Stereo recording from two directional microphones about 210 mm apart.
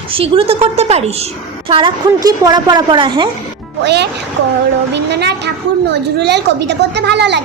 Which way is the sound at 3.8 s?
55° right (ahead or behind).